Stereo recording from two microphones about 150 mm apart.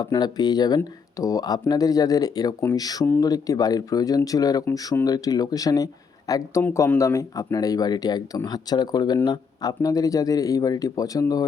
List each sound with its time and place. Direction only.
0.0 s speech: 25° left (ahead or behind)